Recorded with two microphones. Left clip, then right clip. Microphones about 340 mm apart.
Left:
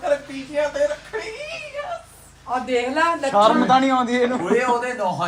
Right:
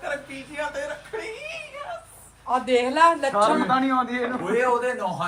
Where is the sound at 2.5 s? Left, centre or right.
Right.